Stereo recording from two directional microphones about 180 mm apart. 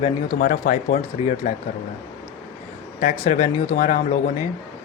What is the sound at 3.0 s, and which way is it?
Speech, 45° left (ahead or behind).